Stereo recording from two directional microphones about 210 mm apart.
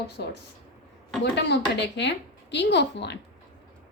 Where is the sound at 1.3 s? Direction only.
55° left (ahead or behind).